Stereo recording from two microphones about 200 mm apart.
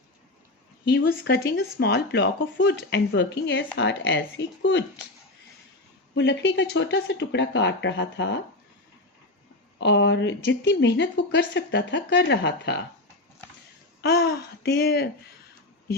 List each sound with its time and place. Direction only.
0.9 s a woman's voice: 50° left (ahead or behind)
6.1 s a woman's voice: 60° left (ahead or behind)
9.8 s a woman's voice: 60° left (ahead or behind)
14.0 s speech: 50° left (ahead or behind)